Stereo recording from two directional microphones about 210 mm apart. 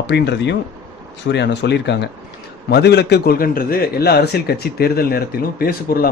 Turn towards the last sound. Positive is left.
turn(degrees=45)  # may be behind; listen again after turning